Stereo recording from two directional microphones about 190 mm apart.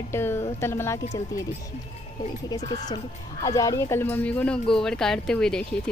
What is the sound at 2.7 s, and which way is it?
Speech, 35° left (ahead or behind).